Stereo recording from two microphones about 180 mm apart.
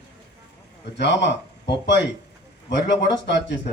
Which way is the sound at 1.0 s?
75° left (ahead or behind).